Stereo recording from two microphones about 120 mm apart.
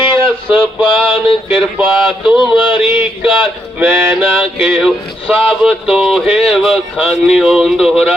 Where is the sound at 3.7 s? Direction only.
15° right (ahead or behind).